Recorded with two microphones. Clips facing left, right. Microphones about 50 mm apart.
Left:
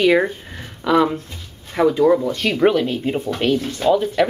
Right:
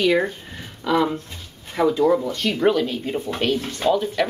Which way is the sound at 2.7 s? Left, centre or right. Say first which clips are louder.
Left 1 dB; left.